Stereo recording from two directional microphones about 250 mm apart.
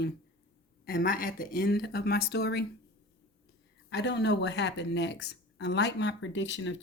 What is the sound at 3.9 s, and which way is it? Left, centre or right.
Speech, left.